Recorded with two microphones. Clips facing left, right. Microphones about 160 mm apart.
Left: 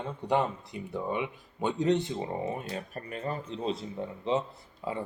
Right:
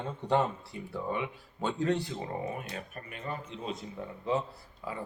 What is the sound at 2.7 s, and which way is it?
Speech, 35° left (ahead or behind).